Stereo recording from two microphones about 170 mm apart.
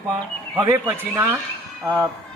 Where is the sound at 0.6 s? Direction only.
20° right (ahead or behind).